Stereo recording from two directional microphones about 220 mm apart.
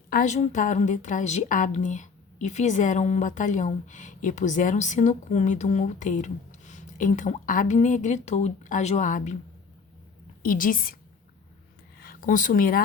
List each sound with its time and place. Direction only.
0.1 s a woman's voice: 35° left (ahead or behind)
10.4 s a woman's voice: 40° left (ahead or behind)
11.9 s speech: 40° left (ahead or behind)